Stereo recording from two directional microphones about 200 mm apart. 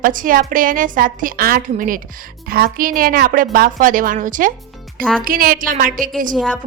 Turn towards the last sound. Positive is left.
turn(degrees=0)  # may be behind; listen again after turning